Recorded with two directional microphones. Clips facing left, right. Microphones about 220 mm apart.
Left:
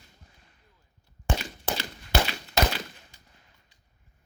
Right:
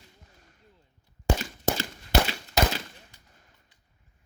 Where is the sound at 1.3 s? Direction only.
45° right (ahead or behind).